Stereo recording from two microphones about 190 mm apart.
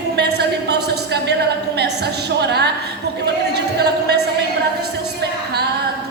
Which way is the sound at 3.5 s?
60° right (ahead or behind).